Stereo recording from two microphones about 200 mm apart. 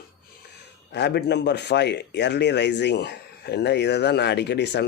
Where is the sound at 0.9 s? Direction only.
55° left (ahead or behind).